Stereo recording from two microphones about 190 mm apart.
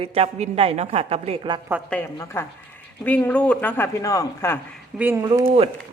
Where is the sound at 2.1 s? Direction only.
15° left (ahead or behind).